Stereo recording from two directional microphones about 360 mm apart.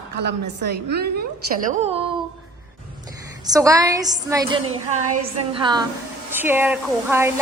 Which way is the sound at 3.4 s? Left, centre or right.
Centre.